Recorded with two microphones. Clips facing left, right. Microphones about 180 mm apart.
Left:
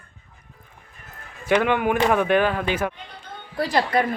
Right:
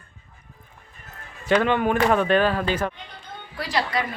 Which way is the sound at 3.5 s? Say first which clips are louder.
Left 5 dB; 50° left (ahead or behind).